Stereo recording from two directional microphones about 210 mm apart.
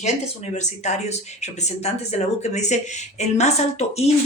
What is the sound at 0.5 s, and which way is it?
Speech, 35° left (ahead or behind).